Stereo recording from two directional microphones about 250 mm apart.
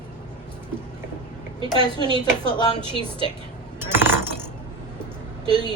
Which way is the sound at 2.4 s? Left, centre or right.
Centre.